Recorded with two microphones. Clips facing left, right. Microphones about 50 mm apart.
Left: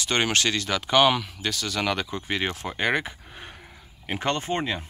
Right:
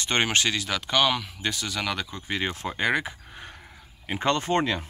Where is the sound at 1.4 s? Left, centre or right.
Centre.